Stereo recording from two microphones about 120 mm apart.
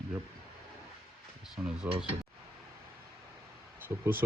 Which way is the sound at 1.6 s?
5° right (ahead or behind).